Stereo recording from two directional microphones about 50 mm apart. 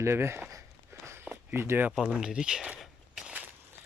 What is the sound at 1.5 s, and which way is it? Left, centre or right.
Speech, right.